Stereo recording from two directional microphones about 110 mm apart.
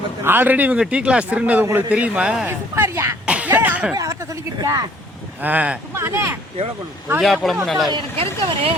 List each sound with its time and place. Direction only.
0.3 s a man's voice: 15° right (ahead or behind)
2.5 s speech: 25° right (ahead or behind)
3.2 s a sound: 10° right (ahead or behind)
3.9 s speech: 30° right (ahead or behind)
5.4 s a man's voice: 15° right (ahead or behind)
6.0 s speech: 25° right (ahead or behind)
7.2 s a man's voice: centre (ahead or behind)
8.1 s speech: 60° right (ahead or behind)